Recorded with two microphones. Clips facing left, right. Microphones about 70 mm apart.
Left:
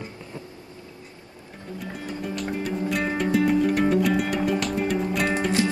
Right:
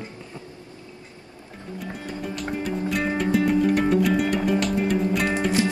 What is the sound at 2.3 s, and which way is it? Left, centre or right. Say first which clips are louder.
Music: even; centre.